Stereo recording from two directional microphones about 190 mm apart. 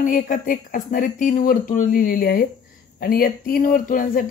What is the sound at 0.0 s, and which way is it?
Speech, 45° left (ahead or behind).